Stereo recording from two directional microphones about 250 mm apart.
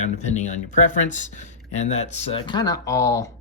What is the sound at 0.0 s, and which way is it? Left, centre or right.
Speech, left.